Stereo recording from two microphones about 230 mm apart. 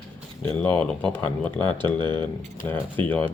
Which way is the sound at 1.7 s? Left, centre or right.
Centre.